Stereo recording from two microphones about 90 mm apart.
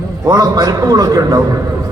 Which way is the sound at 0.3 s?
45° right (ahead or behind).